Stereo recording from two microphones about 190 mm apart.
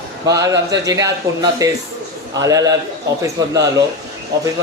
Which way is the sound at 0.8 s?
20° right (ahead or behind).